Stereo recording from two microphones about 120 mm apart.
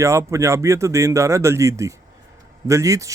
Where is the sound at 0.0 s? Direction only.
25° right (ahead or behind).